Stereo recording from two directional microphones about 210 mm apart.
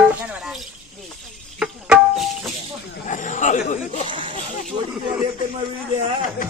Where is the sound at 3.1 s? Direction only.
35° left (ahead or behind).